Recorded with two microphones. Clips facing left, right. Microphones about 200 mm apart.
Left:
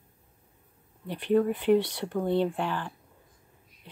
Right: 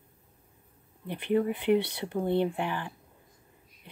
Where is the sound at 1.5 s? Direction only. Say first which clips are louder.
Left 2 dB; 60° right (ahead or behind).